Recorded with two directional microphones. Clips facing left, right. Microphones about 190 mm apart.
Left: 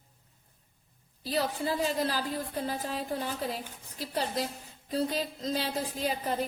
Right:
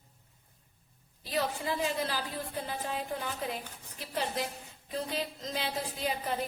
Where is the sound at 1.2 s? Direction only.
35° left (ahead or behind).